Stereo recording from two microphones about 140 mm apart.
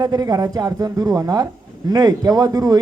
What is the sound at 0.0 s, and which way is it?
A man's voice, 30° right (ahead or behind).